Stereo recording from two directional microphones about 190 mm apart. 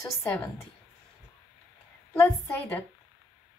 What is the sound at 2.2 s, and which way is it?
Speech, 10° left (ahead or behind).